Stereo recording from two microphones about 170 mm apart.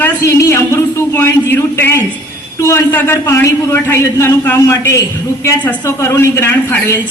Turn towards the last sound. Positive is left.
turn(degrees=15)  # may be behind; listen again after turning